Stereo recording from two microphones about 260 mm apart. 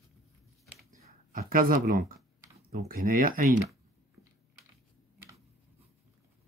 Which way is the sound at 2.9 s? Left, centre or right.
Right.